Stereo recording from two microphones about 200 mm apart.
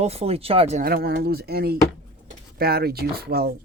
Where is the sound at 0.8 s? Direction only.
50° right (ahead or behind).